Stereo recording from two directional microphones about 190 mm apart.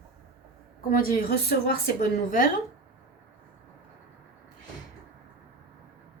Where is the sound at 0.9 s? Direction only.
50° left (ahead or behind).